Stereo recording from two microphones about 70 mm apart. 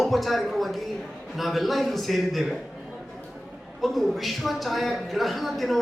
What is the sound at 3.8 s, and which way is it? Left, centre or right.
A man's voice, centre.